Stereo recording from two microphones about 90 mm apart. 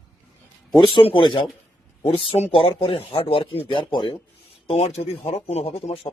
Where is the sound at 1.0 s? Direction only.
75° left (ahead or behind).